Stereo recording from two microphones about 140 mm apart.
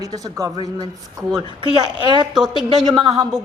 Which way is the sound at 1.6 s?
30° right (ahead or behind).